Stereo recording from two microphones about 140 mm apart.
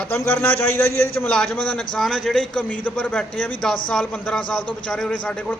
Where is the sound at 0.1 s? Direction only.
15° left (ahead or behind).